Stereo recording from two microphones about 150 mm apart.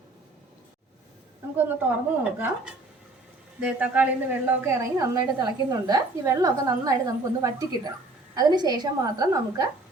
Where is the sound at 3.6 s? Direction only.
10° right (ahead or behind).